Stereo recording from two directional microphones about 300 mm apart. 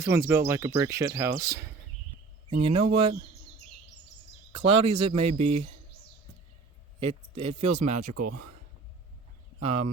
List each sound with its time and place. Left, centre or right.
0.0 s speech: centre
4.5 s speech: centre
7.0 s speech: centre
8.1 s speech: right
9.6 s speech: right